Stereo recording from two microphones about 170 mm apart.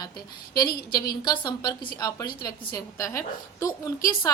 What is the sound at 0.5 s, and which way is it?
A woman's voice, 20° left (ahead or behind).